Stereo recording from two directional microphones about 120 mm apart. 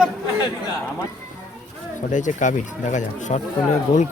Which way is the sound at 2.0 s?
90° left.